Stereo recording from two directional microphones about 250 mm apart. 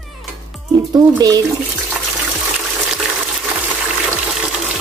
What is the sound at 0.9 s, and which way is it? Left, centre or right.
Speech, centre.